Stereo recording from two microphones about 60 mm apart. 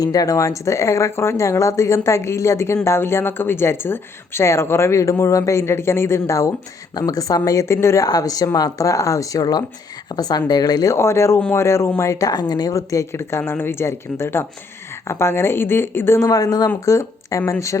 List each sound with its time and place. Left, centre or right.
0.0 s speech: left
5.3 s speech: left
6.9 s speech: left
8.0 s speech: left
10.9 s speech: left
13.1 s speech: left
16.2 s speech: left
16.8 s speech: left